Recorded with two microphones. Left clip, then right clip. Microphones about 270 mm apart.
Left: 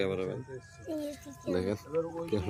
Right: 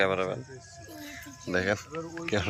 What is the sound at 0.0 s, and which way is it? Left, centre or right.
Speech, centre.